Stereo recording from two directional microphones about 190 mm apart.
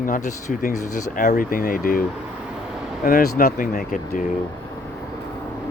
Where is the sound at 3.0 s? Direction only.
50° left (ahead or behind).